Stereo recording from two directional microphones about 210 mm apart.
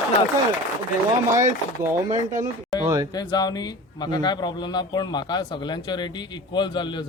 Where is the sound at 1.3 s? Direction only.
15° right (ahead or behind).